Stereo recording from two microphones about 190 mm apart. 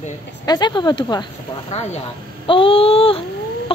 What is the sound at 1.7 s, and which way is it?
Speech, 35° left (ahead or behind).